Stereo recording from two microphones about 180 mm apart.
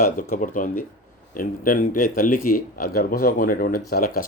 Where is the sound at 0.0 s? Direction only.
50° left (ahead or behind).